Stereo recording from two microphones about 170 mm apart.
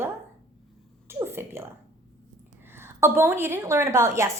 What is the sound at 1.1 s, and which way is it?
Speech, 15° right (ahead or behind).